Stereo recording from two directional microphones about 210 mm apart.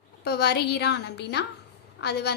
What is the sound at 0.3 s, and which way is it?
A woman's voice, 50° left (ahead or behind).